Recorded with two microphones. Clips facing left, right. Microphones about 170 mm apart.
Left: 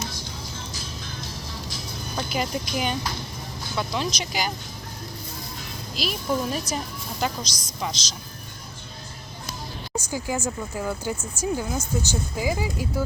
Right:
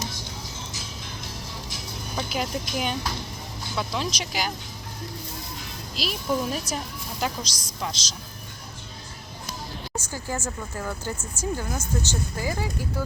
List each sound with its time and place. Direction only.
2.3 s a woman's voice: centre (ahead or behind)
6.0 s a woman's voice: centre (ahead or behind)
9.9 s speech: 10° left (ahead or behind)